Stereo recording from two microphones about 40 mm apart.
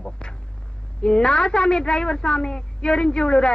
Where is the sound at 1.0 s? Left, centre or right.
Left.